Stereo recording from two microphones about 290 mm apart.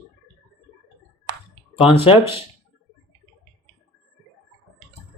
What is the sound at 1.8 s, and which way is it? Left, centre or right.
Speech, centre.